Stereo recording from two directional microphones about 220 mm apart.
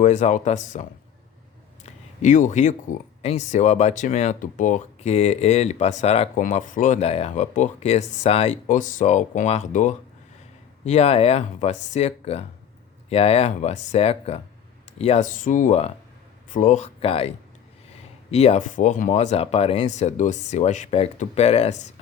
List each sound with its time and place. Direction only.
0.0 s speech: 35° left (ahead or behind)
1.8 s a sound: 35° left (ahead or behind)
3.2 s speech: 30° left (ahead or behind)